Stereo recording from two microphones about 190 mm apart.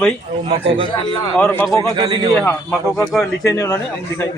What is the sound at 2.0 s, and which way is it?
Speech, 25° right (ahead or behind).